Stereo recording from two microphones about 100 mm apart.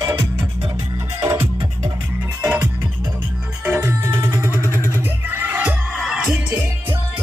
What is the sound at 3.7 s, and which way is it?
Music, 25° right (ahead or behind).